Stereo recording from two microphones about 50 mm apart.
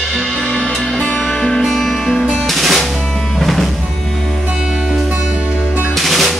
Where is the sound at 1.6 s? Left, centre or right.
Centre.